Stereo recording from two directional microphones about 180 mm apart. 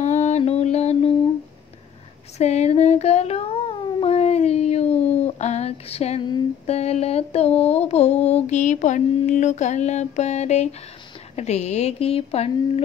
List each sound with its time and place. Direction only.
0.0 s mantra: 40° left (ahead or behind)
2.3 s a sound: 40° left (ahead or behind)
11.3 s speech: 40° left (ahead or behind)